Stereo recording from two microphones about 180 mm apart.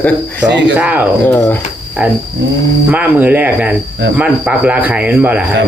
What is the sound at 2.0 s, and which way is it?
Speech, 10° right (ahead or behind).